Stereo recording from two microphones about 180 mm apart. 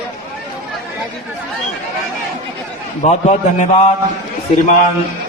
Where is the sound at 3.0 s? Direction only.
40° left (ahead or behind).